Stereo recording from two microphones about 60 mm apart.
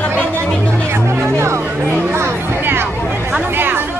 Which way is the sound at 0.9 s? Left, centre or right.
Right.